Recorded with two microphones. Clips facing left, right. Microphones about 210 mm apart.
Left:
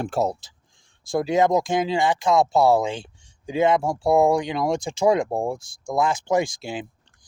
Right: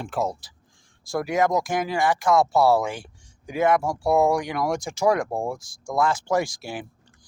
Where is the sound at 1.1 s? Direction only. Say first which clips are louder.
Left 3 dB; 25° left (ahead or behind).